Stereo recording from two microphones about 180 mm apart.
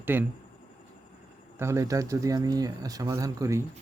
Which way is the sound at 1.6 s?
15° right (ahead or behind).